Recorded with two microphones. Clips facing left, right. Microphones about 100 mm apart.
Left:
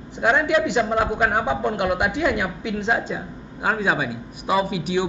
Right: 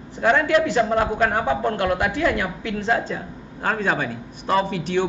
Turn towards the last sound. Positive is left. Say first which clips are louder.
# right 1 dB
turn(degrees=10)  # may be behind; listen again after turning